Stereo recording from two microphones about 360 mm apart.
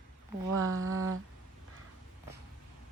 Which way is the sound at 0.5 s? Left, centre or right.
Right.